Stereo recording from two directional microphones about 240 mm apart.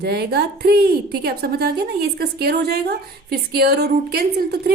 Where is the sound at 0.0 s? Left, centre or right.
Right.